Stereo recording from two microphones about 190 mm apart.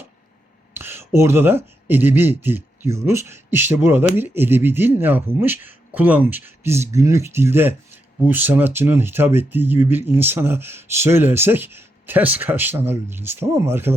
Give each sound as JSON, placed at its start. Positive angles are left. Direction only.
{"t": 0.7, "sound": "speech", "side_deg": -10}